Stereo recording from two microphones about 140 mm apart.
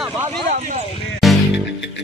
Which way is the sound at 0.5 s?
55° right (ahead or behind).